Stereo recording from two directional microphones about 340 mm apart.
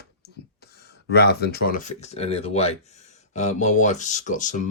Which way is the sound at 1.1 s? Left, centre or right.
Left.